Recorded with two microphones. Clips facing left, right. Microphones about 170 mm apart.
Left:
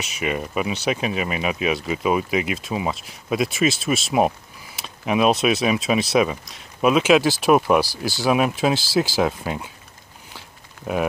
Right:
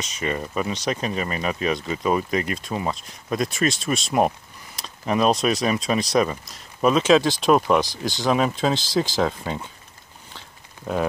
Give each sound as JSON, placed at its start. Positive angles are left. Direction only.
{"t": 0.1, "sound": "speech", "side_deg": 10}
{"t": 10.9, "sound": "speech", "side_deg": 5}